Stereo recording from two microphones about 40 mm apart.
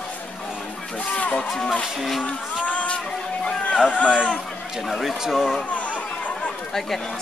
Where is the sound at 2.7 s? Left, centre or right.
Left.